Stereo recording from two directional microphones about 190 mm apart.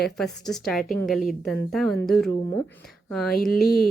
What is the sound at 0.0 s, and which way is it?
Speech, centre (ahead or behind).